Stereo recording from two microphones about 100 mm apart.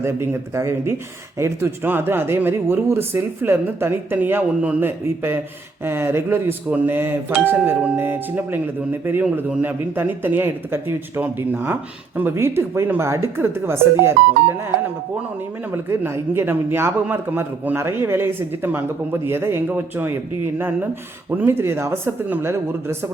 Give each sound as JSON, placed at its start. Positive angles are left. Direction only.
{"t": 0.0, "sound": "a man's voice", "side_deg": -30}
{"t": 15.7, "sound": "a man's voice", "side_deg": -25}
{"t": 21.2, "sound": "a man's voice", "side_deg": -25}